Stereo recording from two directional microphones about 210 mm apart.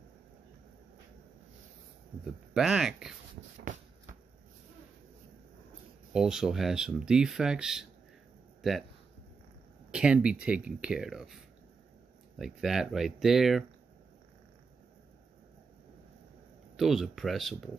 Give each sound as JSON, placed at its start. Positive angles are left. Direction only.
{"t": 2.5, "sound": "speech", "side_deg": 0}
{"t": 3.7, "sound": "a sound", "side_deg": -40}
{"t": 6.1, "sound": "speech", "side_deg": -5}
{"t": 9.8, "sound": "speech", "side_deg": -5}
{"t": 12.4, "sound": "speech", "side_deg": 0}
{"t": 16.7, "sound": "speech", "side_deg": 0}